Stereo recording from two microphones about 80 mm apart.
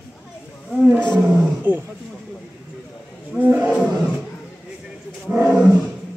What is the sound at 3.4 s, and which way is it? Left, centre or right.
Wild animals, centre.